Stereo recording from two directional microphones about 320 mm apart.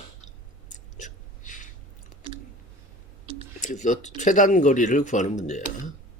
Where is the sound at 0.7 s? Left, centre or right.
Left.